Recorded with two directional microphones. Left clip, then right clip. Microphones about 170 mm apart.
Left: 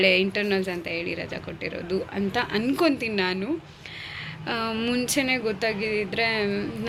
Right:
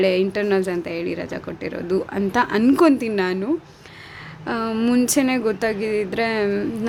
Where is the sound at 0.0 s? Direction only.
40° right (ahead or behind).